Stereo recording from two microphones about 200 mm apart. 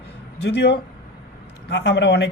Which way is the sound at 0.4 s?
60° left (ahead or behind).